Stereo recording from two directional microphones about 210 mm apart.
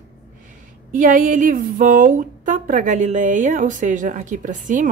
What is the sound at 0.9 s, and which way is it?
A woman's voice, 40° right (ahead or behind).